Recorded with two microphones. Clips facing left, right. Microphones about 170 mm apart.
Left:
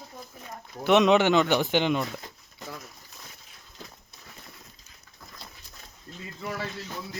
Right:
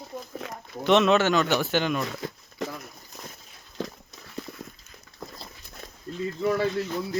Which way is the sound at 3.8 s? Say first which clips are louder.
Right 13 dB; 90° right.